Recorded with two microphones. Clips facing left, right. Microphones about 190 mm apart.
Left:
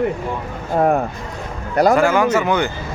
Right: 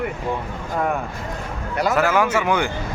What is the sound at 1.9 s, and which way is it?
Speech, 5° right (ahead or behind).